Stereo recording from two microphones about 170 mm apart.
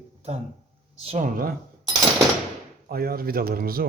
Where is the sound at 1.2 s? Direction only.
55° right (ahead or behind).